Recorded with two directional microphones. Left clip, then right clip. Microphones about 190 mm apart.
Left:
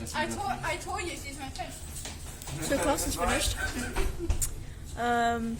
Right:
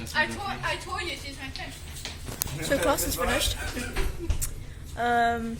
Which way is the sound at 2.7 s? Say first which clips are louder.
Right 3 dB; centre (ahead or behind).